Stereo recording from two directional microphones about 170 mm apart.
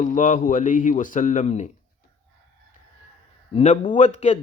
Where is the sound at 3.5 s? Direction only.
45° left (ahead or behind).